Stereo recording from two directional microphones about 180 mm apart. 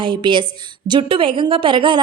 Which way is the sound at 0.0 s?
25° right (ahead or behind).